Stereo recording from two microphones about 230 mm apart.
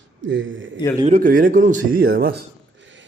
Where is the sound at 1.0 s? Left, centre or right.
Right.